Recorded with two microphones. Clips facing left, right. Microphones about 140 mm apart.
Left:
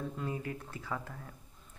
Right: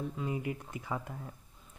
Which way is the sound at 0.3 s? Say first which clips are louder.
Right 3 dB; 15° right (ahead or behind).